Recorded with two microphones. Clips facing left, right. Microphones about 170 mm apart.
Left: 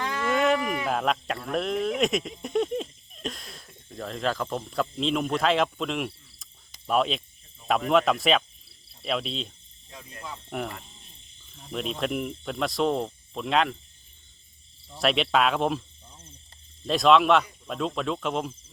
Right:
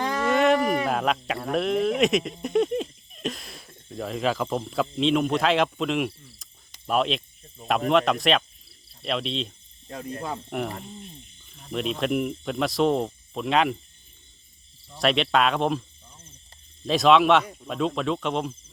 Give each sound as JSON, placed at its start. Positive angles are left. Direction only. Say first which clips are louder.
{"t": 0.3, "sound": "a sound", "louder": "right 3 dB", "side_deg": 0}
{"t": 0.6, "sound": "a sound", "louder": "right 6 dB", "side_deg": -40}
{"t": 0.9, "sound": "speech", "louder": "right 1 dB", "side_deg": 0}
{"t": 9.9, "sound": "speech", "louder": "right 12 dB", "side_deg": -60}
{"t": 10.5, "sound": "speech", "louder": "right 3 dB", "side_deg": 0}
{"t": 14.9, "sound": "speech", "louder": "right 1 dB", "side_deg": 0}
{"t": 16.8, "sound": "speech", "louder": "right 1 dB", "side_deg": 0}